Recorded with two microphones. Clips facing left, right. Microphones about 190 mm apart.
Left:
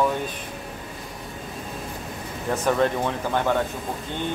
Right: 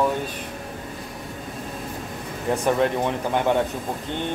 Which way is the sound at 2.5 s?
15° right (ahead or behind).